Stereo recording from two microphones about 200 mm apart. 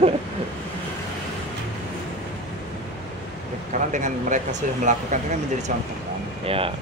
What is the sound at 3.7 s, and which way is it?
Speech, 40° right (ahead or behind).